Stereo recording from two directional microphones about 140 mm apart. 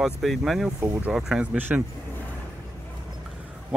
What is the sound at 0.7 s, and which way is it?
Speech, 15° right (ahead or behind).